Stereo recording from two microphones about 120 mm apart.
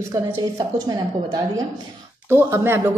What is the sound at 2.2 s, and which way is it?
Speech, 20° right (ahead or behind).